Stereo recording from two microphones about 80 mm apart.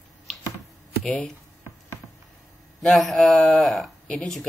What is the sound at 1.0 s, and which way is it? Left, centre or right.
Speech, centre.